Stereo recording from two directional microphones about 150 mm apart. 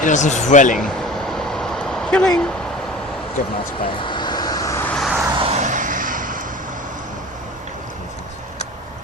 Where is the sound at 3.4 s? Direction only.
80° left.